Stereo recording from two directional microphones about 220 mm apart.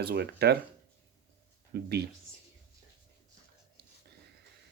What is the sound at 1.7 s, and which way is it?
Speech, 45° right (ahead or behind).